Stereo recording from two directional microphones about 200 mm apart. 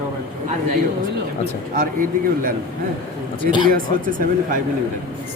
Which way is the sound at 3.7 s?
45° right (ahead or behind).